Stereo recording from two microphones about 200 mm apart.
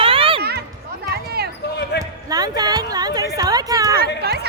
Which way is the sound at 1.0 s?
50° right (ahead or behind).